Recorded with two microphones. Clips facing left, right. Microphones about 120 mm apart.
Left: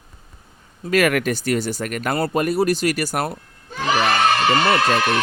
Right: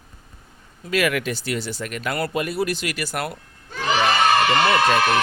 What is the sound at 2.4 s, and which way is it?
Speech, 45° left (ahead or behind).